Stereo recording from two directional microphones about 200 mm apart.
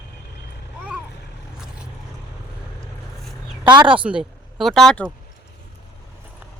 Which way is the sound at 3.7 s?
25° right (ahead or behind).